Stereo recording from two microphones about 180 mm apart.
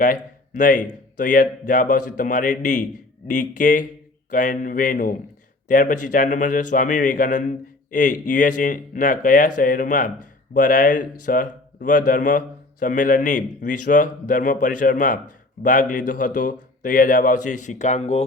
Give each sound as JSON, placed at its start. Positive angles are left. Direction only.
{"t": 0.0, "sound": "a man's voice", "side_deg": 45}